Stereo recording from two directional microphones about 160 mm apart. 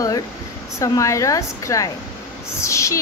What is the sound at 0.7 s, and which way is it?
A woman's voice, 20° left (ahead or behind).